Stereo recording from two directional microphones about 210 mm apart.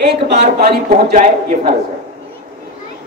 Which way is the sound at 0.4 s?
45° right (ahead or behind).